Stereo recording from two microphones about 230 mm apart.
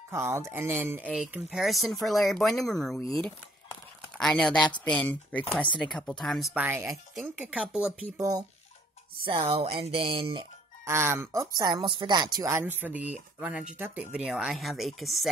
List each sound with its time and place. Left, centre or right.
0.1 s speech: centre
8.2 s speech: centre
10.9 s speech: centre